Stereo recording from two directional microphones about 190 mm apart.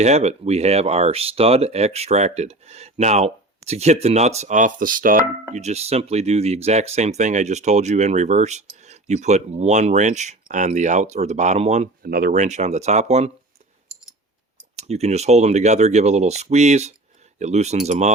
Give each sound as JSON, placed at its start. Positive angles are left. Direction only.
{"t": 0.0, "sound": "speech", "side_deg": -35}
{"t": 5.5, "sound": "speech", "side_deg": -35}
{"t": 12.0, "sound": "speech", "side_deg": -50}
{"t": 14.8, "sound": "speech", "side_deg": -35}